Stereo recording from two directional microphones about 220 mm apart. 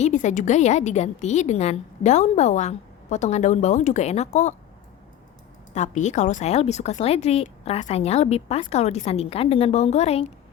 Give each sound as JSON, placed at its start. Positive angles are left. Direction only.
{"t": 0.0, "sound": "a woman's voice", "side_deg": 35}
{"t": 5.7, "sound": "speech", "side_deg": 35}